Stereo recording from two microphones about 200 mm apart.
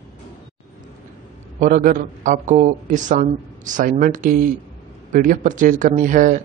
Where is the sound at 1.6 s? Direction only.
40° right (ahead or behind).